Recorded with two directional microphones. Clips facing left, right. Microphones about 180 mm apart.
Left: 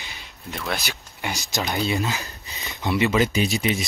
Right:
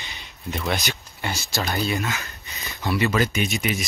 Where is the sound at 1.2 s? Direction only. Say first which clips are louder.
Even; 15° left (ahead or behind).